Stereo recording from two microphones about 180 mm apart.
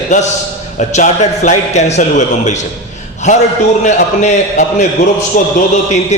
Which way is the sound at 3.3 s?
40° left (ahead or behind).